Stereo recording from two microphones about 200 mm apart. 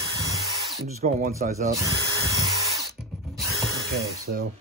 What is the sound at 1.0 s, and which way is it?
Speech, 35° right (ahead or behind).